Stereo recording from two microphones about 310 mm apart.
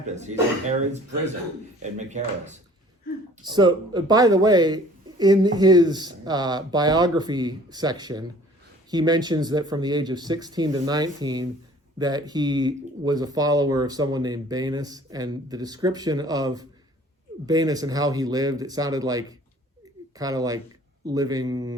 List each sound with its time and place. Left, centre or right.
0.0 s speech: right